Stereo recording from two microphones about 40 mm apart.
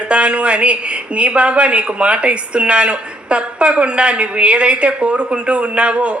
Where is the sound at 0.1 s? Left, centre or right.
Right.